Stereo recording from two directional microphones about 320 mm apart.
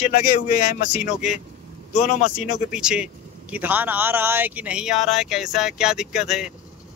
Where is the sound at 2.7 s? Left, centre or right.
Centre.